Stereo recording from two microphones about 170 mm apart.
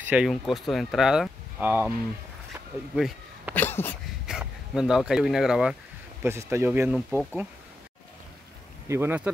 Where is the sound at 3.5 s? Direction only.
10° left (ahead or behind).